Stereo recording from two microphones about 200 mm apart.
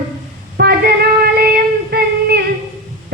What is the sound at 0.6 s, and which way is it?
Female singing, 50° right (ahead or behind).